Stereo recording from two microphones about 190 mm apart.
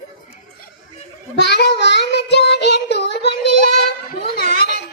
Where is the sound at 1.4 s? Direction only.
65° left (ahead or behind).